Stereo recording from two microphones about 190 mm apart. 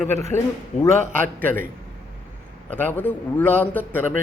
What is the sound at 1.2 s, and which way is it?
Speech, 10° left (ahead or behind).